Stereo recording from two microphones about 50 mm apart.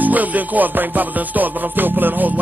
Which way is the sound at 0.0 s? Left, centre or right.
Right.